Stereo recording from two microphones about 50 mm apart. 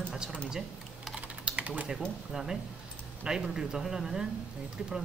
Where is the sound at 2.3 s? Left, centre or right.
Centre.